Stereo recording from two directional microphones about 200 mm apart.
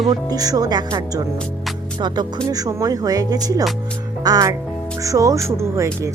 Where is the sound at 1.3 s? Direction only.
5° left (ahead or behind).